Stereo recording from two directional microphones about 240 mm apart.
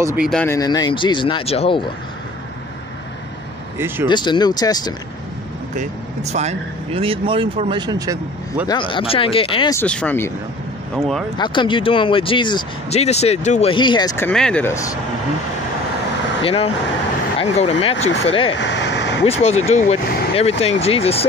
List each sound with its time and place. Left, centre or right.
0.0 s speech: centre
0.3 s speech: centre
3.7 s speech: centre
4.1 s speech: centre
5.8 s speech: right
8.6 s speech: centre
9.8 s speech: centre
11.3 s speech: centre
16.4 s speech: left
18.5 s vehicle: left
19.2 s speech: left